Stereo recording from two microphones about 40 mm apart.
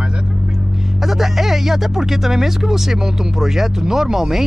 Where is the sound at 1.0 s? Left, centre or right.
Centre.